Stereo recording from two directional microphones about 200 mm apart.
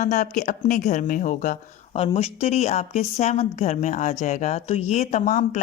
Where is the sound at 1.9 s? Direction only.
30° left (ahead or behind).